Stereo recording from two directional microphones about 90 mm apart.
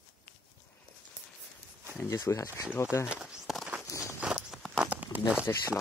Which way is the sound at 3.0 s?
10° right (ahead or behind).